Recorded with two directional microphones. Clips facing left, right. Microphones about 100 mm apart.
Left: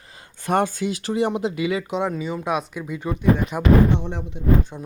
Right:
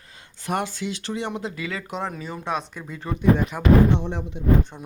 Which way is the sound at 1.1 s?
25° left (ahead or behind).